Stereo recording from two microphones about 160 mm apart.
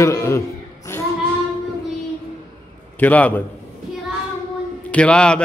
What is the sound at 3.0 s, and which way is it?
Speech, 10° left (ahead or behind).